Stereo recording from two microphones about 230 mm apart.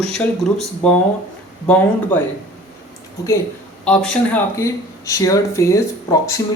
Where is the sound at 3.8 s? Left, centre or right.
Centre.